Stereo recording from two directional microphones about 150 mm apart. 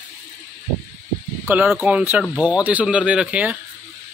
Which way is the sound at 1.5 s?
10° right (ahead or behind).